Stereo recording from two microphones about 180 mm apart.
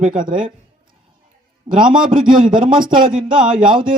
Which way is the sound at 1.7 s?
25° right (ahead or behind).